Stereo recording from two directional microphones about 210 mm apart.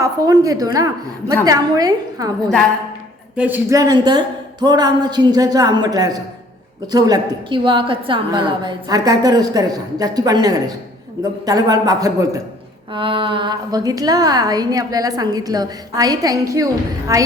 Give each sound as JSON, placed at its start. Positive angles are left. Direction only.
{"t": 0.0, "sound": "a woman's voice", "side_deg": -15}